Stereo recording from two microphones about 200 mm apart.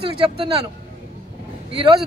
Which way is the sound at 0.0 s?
25° right (ahead or behind).